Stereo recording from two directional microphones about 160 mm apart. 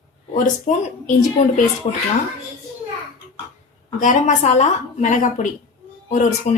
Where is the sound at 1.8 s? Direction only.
40° left (ahead or behind).